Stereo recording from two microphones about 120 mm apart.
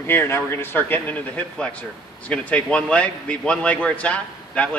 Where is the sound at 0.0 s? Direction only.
20° left (ahead or behind).